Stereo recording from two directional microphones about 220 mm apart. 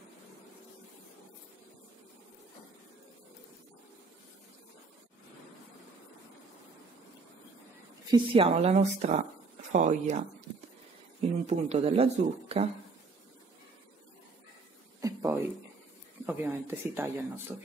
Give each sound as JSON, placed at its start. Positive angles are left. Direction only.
{"t": 8.1, "sound": "speech", "side_deg": -25}
{"t": 15.0, "sound": "a sound", "side_deg": -15}
{"t": 16.3, "sound": "speech", "side_deg": -10}